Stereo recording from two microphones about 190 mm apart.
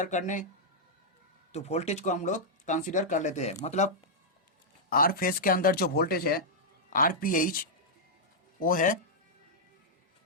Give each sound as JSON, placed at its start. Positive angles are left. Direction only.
{"t": 0.0, "sound": "speech", "side_deg": 40}
{"t": 1.5, "sound": "speech", "side_deg": 35}
{"t": 4.9, "sound": "speech", "side_deg": 50}